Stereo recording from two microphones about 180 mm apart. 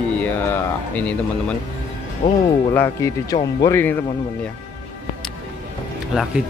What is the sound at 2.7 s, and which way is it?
Speech, 15° left (ahead or behind).